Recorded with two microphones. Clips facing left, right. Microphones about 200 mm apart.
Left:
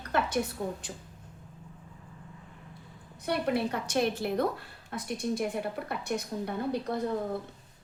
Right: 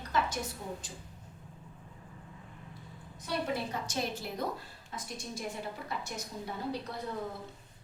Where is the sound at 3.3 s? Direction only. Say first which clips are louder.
Left 6 dB; 65° left (ahead or behind).